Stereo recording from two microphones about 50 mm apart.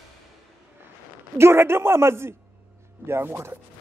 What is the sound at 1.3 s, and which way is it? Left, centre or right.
A man's voice, right.